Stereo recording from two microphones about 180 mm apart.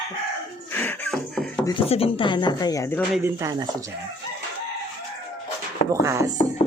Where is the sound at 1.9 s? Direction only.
30° left (ahead or behind).